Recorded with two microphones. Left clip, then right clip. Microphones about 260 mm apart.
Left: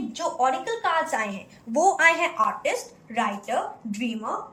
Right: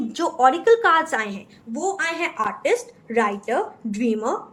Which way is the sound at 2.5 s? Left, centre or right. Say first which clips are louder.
Right 4 dB; centre.